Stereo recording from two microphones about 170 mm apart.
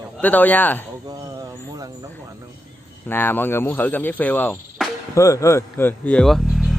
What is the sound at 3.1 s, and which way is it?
Speech, 10° left (ahead or behind).